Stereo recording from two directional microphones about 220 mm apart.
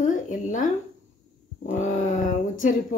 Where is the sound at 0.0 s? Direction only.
35° left (ahead or behind).